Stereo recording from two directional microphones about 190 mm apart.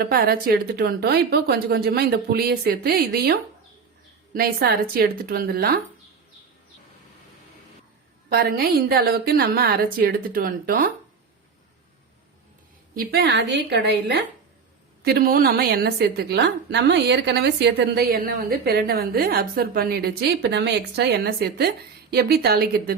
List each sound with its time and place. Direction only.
0.0 s speech: 50° right (ahead or behind)
8.3 s speech: 55° right (ahead or behind)
13.0 s a woman's voice: 60° right (ahead or behind)
15.0 s a woman's voice: 55° right (ahead or behind)